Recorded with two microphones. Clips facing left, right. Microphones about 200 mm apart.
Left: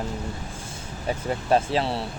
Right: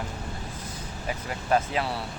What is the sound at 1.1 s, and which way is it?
Speech, 30° left (ahead or behind).